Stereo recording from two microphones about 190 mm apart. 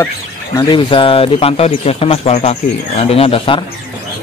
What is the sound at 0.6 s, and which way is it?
Speech, 25° left (ahead or behind).